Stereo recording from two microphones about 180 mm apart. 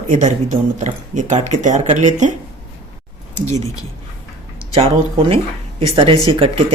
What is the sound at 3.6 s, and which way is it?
Speech, 20° left (ahead or behind).